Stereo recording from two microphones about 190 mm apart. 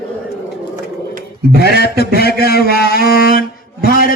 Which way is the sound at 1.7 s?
60° left (ahead or behind).